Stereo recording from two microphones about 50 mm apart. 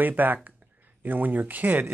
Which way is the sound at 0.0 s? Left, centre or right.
Right.